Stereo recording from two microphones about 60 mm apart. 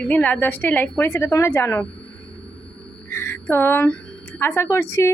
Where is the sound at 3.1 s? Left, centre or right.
Left.